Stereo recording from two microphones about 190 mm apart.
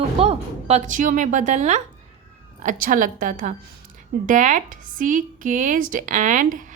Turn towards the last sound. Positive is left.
turn(degrees=-40)  # may be behind; listen again after turning